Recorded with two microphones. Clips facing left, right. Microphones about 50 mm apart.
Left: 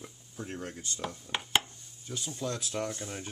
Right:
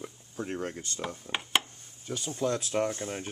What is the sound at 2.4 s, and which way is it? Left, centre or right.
Speech, right.